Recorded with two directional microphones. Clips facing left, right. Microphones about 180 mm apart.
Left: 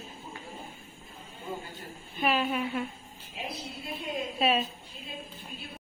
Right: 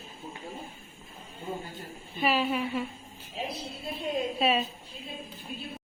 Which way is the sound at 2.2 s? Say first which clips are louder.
Right 1 dB; centre (ahead or behind).